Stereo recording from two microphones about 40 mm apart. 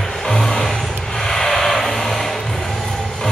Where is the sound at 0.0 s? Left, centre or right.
Centre.